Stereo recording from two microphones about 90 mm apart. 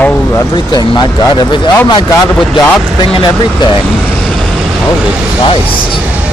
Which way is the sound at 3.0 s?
65° left (ahead or behind).